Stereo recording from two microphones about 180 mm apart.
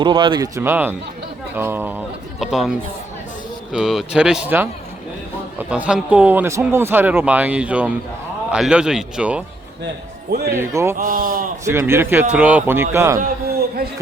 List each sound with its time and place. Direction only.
0.0 s speech: 25° right (ahead or behind); by 9.4 s 5° right (ahead or behind)
10.5 s speech: 15° right (ahead or behind)
10.9 s speech: 50° right (ahead or behind)
11.6 s speech: 15° right (ahead or behind)
13.1 s a sound: 55° right (ahead or behind)